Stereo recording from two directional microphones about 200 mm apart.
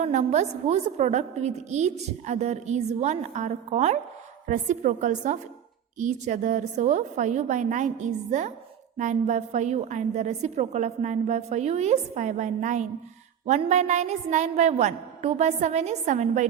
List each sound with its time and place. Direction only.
0.0 s a woman's voice: 35° right (ahead or behind)